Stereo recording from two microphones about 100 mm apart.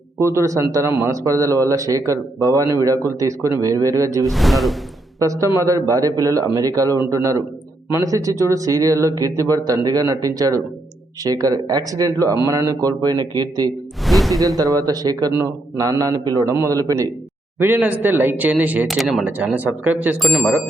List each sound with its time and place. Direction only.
0.2 s a man's voice: 30° right (ahead or behind)
4.3 s speech: centre (ahead or behind)
5.2 s a man's voice: 30° right (ahead or behind)
14.0 s a sound: centre (ahead or behind)
14.4 s a man's voice: 35° right (ahead or behind)
17.7 s speech: 15° right (ahead or behind)
18.9 s speech: centre (ahead or behind)
19.2 s speech: 10° right (ahead or behind)
20.1 s speech: centre (ahead or behind)